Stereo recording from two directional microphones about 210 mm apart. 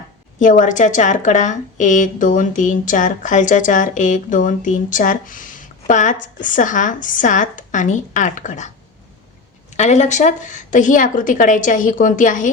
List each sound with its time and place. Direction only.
0.3 s speech: 35° left (ahead or behind)